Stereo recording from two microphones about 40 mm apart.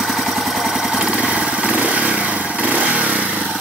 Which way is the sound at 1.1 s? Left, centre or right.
Right.